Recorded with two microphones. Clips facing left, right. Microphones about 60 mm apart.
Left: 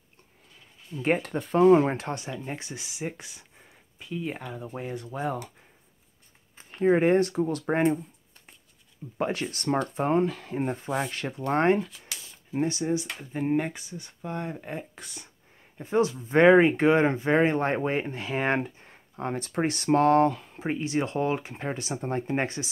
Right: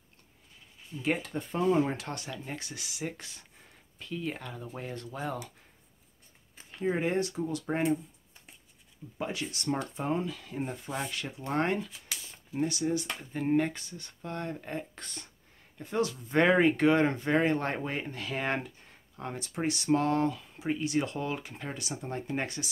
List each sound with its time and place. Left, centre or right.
0.9 s speech: left
1.3 s speech: left
2.0 s speech: left
6.7 s speech: left
9.2 s speech: left
13.2 s speech: centre
15.8 s speech: left